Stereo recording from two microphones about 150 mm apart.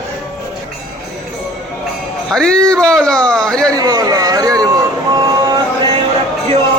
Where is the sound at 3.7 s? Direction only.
25° right (ahead or behind).